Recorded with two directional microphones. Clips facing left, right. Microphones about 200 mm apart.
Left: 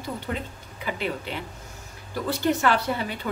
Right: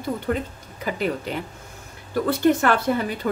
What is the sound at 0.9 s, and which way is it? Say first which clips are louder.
A woman's voice: right 4 dB; 45° right (ahead or behind).